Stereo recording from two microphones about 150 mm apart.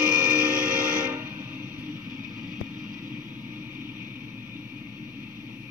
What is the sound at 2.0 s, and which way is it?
Vehicle, 60° right (ahead or behind).